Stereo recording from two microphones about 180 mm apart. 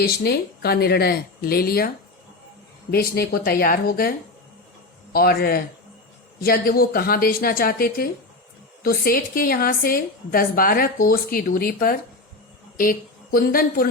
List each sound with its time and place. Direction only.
0.2 s speech: 60° left (ahead or behind)
2.9 s speech: 55° left (ahead or behind)
5.1 s a woman's voice: 55° left (ahead or behind)